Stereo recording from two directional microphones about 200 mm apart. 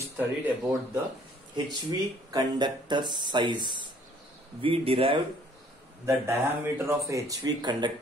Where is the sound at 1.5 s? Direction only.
20° right (ahead or behind).